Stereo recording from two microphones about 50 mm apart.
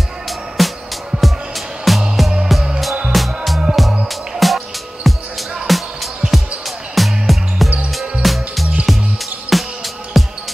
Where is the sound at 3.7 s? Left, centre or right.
Centre.